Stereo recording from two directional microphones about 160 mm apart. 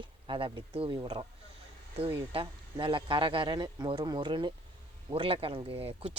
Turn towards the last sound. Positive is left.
turn(degrees=-35)  # may be behind; listen again after turning